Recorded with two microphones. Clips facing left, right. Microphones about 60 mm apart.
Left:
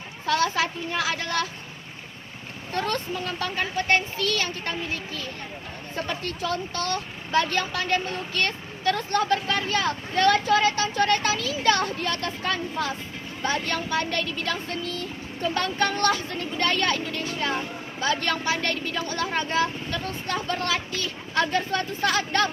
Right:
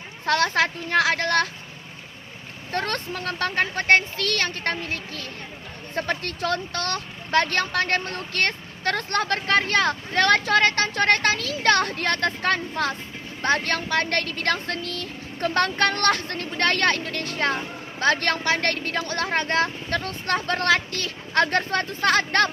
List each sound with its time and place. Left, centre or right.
0.3 s speech: right
2.7 s speech: right